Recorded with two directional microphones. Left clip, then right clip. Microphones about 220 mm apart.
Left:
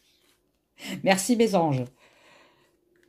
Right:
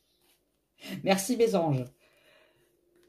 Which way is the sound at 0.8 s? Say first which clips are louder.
Left 4 dB; 50° left (ahead or behind).